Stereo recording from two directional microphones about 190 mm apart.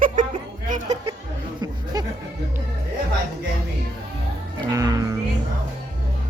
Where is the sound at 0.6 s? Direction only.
40° right (ahead or behind).